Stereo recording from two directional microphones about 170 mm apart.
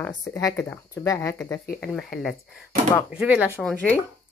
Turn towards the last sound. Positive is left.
turn(degrees=10)  # may be behind; listen again after turning